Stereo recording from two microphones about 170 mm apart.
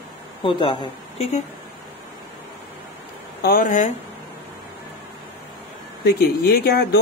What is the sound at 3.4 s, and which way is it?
Speech, 55° left (ahead or behind).